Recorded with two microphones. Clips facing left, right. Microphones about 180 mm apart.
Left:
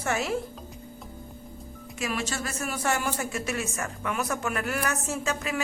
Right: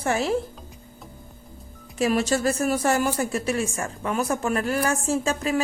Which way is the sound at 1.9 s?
35° right (ahead or behind).